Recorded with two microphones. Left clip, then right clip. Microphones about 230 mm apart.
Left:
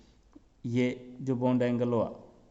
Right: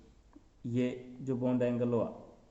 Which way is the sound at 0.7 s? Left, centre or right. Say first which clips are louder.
Left 4 dB; left.